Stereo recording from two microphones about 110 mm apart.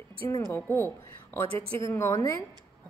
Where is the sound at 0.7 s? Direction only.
20° left (ahead or behind).